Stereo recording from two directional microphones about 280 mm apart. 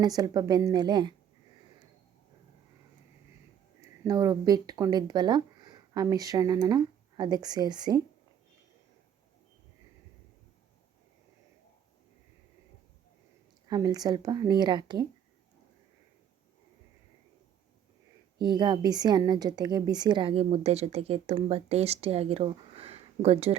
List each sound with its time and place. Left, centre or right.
0.0 s speech: centre
4.0 s speech: centre
13.7 s speech: centre
18.4 s a woman's voice: centre